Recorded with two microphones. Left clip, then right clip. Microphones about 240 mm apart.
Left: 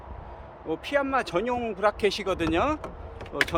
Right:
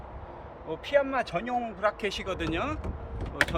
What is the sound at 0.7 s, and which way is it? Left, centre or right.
Speech, left.